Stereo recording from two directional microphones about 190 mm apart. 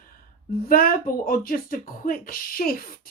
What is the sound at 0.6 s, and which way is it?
Speech, 50° left (ahead or behind).